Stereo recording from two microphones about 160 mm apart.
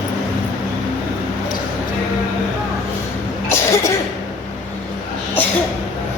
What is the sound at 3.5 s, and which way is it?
Cough, 20° left (ahead or behind).